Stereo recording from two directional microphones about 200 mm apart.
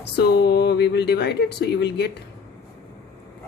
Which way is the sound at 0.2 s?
55° left (ahead or behind).